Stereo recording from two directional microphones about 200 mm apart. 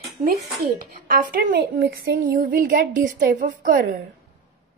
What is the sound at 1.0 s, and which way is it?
A woman's voice, 50° right (ahead or behind).